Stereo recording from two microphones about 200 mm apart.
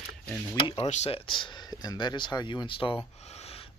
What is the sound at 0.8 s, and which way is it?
Speech, 35° left (ahead or behind).